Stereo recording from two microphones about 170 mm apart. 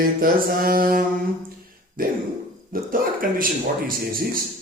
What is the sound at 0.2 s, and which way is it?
A man's voice, 60° right (ahead or behind).